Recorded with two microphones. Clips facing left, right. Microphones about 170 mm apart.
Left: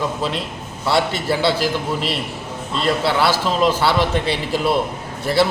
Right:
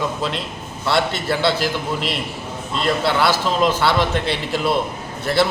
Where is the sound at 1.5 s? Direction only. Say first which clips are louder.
Left 1 dB; 35° left (ahead or behind).